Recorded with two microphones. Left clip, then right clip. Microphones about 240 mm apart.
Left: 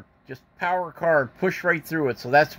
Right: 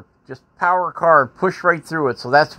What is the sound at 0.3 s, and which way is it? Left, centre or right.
Speech, centre.